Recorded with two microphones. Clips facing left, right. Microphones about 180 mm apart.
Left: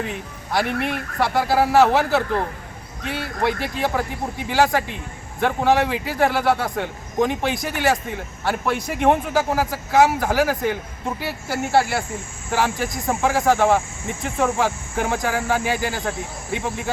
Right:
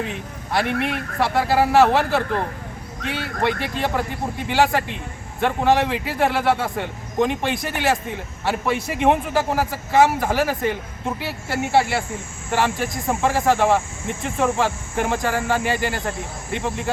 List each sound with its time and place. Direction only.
0.5 s a man's voice: centre (ahead or behind)